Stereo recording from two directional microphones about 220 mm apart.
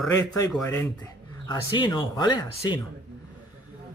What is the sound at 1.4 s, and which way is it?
Speech, 20° left (ahead or behind).